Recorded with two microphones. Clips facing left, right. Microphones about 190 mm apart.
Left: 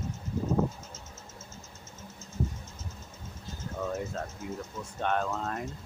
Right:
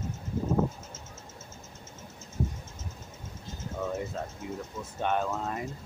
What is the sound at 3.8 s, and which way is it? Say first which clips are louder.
Speech: even; 10° right (ahead or behind).